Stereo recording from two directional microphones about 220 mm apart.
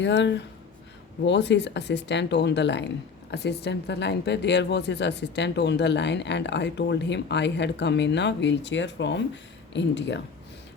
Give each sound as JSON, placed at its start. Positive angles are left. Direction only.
{"t": 0.0, "sound": "speech", "side_deg": 55}